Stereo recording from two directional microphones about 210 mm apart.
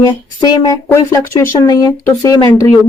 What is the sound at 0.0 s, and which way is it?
Speech, 20° left (ahead or behind).